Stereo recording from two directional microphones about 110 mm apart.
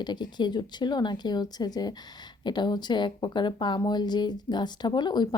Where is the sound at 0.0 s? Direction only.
40° left (ahead or behind).